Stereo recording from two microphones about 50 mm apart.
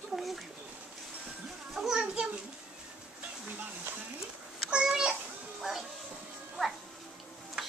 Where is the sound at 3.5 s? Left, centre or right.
Right.